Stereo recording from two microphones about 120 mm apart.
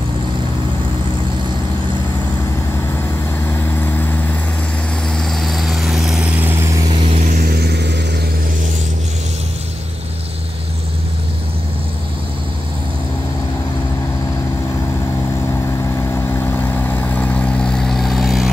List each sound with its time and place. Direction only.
3.4 s vehicle: 20° left (ahead or behind)
5.0 s vehicle: 5° left (ahead or behind); by 6.6 s 15° right (ahead or behind)
16.2 s vehicle: 20° left (ahead or behind); by 18.5 s centre (ahead or behind)